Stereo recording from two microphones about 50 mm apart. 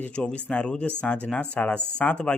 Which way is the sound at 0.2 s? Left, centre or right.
Left.